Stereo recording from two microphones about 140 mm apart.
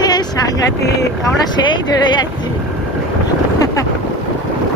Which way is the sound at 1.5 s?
35° left (ahead or behind).